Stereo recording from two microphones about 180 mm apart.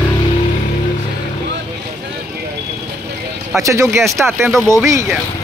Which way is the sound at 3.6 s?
15° right (ahead or behind).